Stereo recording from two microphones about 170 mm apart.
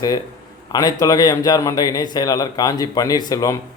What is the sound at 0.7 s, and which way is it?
Speech, 25° left (ahead or behind).